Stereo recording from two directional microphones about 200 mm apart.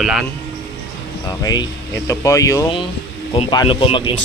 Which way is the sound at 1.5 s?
20° left (ahead or behind).